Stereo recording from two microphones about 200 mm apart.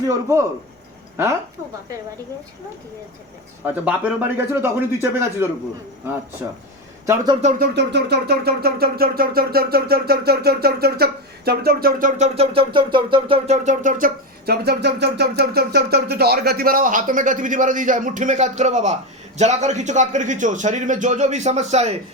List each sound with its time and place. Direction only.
0.0 s a woman's voice: 15° right (ahead or behind)
3.6 s speech: 10° right (ahead or behind)
7.0 s speech: 15° right (ahead or behind)
7.7 s a sound: 55° right (ahead or behind); by 18.9 s 35° right (ahead or behind)
19.4 s speech: 35° right (ahead or behind)